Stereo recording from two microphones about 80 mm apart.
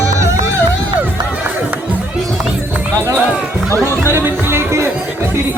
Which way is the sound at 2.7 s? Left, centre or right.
Centre.